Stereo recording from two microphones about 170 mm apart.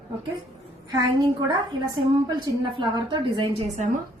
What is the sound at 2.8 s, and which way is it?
A woman's voice, 30° right (ahead or behind).